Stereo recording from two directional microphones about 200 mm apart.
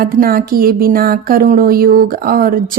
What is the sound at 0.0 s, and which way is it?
Speech, 45° right (ahead or behind).